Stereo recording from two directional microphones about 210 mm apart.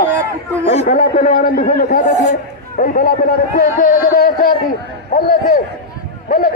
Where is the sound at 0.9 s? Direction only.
35° left (ahead or behind).